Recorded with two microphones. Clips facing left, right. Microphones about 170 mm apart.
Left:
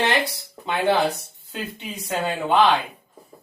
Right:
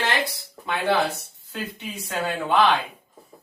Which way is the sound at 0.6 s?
20° left (ahead or behind).